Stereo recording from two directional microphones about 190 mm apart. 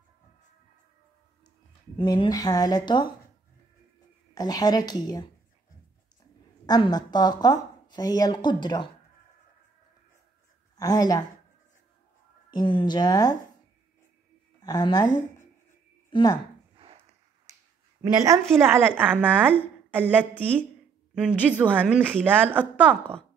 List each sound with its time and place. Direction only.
2.0 s a woman's voice: 25° left (ahead or behind)
4.3 s a woman's voice: 20° left (ahead or behind)
6.6 s a woman's voice: 20° left (ahead or behind)
10.8 s a woman's voice: 20° left (ahead or behind)
12.5 s a woman's voice: 25° left (ahead or behind)
14.6 s a woman's voice: 20° left (ahead or behind)
16.7 s a sound: 30° right (ahead or behind)
17.5 s finger snapping: 15° right (ahead or behind)
18.0 s a woman's voice: 20° right (ahead or behind)
22.8 s a woman's voice: 5° left (ahead or behind)